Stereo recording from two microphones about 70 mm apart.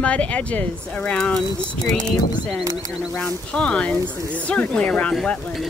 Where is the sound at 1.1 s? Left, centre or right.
Centre.